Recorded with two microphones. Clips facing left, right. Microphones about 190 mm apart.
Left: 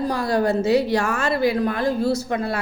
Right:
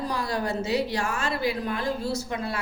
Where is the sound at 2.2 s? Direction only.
55° left (ahead or behind).